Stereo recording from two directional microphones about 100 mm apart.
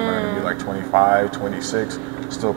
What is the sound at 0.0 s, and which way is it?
Speech, 20° right (ahead or behind).